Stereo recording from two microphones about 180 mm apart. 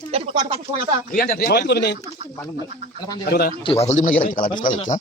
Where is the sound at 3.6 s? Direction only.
30° left (ahead or behind); by 4.7 s 50° left (ahead or behind).